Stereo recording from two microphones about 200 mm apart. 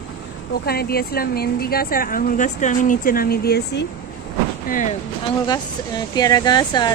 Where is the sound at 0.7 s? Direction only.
50° left (ahead or behind).